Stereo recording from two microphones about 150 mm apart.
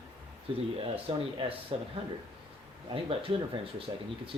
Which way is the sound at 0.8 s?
35° right (ahead or behind).